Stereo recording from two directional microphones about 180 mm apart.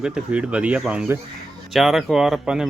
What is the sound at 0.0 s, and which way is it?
Speech, 5° right (ahead or behind).